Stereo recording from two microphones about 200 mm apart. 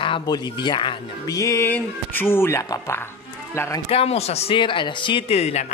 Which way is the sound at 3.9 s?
30° left (ahead or behind).